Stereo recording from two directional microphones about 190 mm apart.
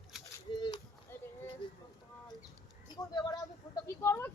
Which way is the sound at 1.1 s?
10° left (ahead or behind).